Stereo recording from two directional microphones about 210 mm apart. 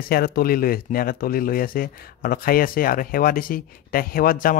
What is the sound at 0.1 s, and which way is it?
Speech, 45° left (ahead or behind).